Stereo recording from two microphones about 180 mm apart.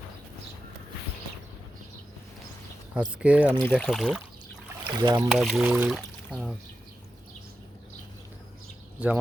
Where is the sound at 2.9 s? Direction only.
5° right (ahead or behind).